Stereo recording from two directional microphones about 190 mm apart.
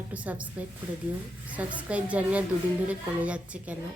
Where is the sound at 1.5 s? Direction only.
5° right (ahead or behind).